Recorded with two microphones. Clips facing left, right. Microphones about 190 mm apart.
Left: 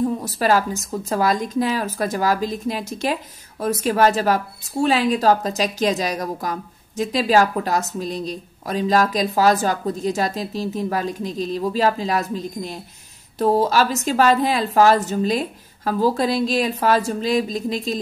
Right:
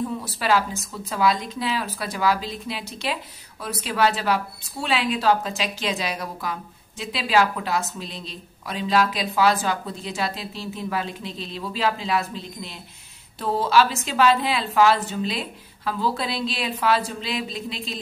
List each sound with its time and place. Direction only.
0.2 s speech: 45° left (ahead or behind)